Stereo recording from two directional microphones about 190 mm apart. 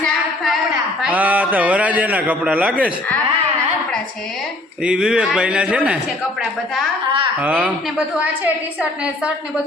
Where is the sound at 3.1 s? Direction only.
5° left (ahead or behind).